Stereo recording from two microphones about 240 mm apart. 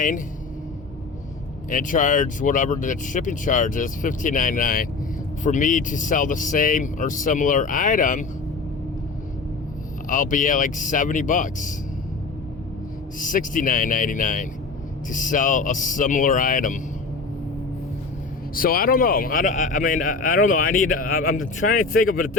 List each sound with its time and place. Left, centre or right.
1.7 s a man's voice: left
10.1 s a man's voice: left
13.1 s a man's voice: left
18.5 s a man's voice: left